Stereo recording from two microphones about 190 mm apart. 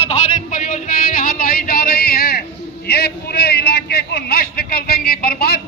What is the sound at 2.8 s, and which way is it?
A man's voice, 55° left (ahead or behind).